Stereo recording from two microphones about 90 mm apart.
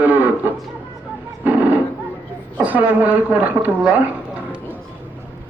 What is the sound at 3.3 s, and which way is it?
Speech, 15° right (ahead or behind).